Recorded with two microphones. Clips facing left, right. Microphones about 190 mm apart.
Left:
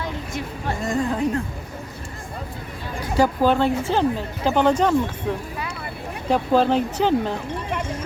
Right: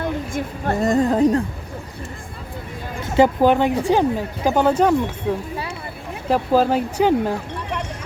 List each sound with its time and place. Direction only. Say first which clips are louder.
0.0 s a woman's voice: right 5 dB; 55° right (ahead or behind); by 1.4 s 35° right (ahead or behind)
3.0 s speech: right 4 dB; 20° right (ahead or behind)